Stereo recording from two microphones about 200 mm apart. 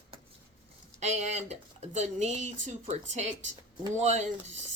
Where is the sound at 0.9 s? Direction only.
35° right (ahead or behind).